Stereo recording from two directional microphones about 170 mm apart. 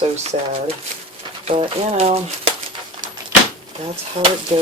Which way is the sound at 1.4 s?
40° right (ahead or behind).